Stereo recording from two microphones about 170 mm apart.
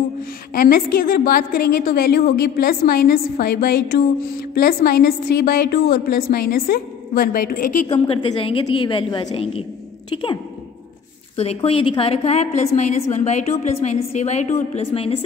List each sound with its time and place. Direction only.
0.6 s a woman's voice: 55° left (ahead or behind)
7.9 s a woman's voice: 30° left (ahead or behind)